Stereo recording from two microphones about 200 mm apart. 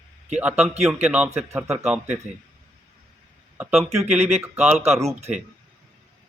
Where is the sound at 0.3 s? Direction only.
5° right (ahead or behind).